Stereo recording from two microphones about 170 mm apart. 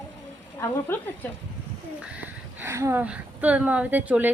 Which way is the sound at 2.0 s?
10° right (ahead or behind).